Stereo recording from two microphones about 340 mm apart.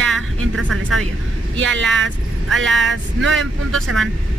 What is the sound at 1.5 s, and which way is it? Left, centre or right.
Vehicle, right.